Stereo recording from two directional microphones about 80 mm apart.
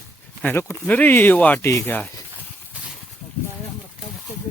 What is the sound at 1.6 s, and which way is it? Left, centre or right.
Speech, left.